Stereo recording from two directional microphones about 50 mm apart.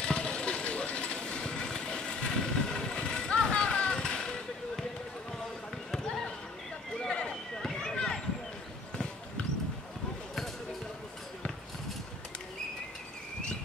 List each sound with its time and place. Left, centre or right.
0.0 s vehicle: centre
5.9 s basketball bounce: centre
7.0 s run: centre